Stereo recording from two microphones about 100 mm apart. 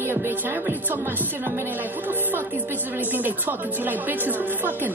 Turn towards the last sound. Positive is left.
turn(degrees=-20)  # may be behind; listen again after turning